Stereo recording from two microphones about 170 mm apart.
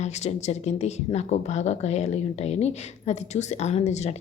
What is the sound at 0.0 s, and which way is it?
A woman's voice, 40° left (ahead or behind).